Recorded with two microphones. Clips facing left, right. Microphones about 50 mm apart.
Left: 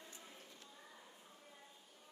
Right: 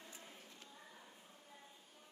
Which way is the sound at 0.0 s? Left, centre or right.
Right.